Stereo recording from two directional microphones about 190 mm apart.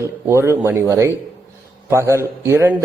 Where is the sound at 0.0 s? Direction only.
15° right (ahead or behind).